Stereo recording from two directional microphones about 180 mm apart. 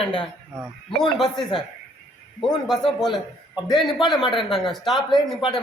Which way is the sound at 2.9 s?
Centre (ahead or behind).